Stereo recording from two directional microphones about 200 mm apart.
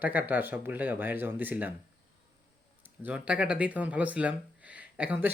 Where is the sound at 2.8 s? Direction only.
10° right (ahead or behind).